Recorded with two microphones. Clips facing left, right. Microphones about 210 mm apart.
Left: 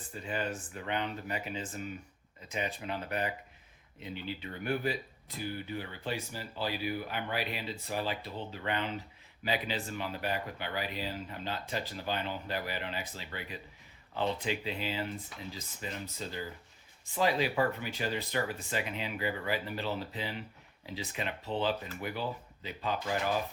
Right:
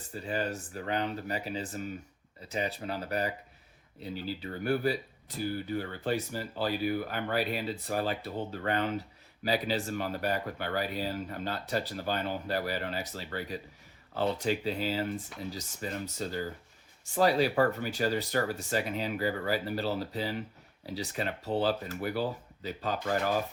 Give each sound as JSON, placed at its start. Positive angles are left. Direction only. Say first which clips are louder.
{"t": 0.1, "sound": "speech", "louder": "right 3 dB", "side_deg": -40}